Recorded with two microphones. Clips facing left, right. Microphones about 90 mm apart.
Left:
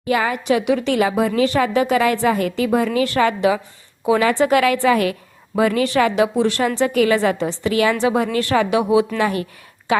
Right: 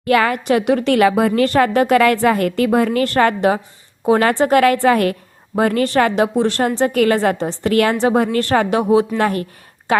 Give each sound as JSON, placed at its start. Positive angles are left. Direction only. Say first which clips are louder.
{"t": 0.0, "sound": "a woman's voice", "louder": "right 4 dB", "side_deg": -65}
{"t": 0.4, "sound": "a woman's voice", "louder": "right 2 dB", "side_deg": -50}